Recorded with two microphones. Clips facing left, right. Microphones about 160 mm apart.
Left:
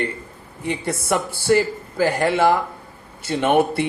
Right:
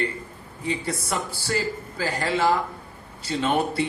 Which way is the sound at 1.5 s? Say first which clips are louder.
Left 6 dB; 55° left (ahead or behind).